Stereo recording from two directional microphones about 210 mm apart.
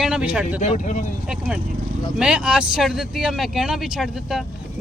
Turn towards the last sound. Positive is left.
turn(degrees=0)  # may be behind; listen again after turning